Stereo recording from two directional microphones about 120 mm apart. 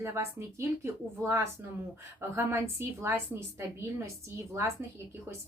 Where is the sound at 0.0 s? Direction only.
20° right (ahead or behind).